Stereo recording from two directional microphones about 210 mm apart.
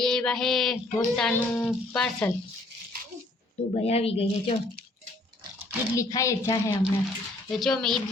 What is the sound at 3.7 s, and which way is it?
Speech, 30° left (ahead or behind).